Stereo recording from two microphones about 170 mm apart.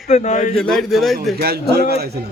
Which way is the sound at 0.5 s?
5° left (ahead or behind).